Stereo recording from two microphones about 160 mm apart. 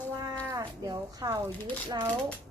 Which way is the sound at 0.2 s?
20° right (ahead or behind).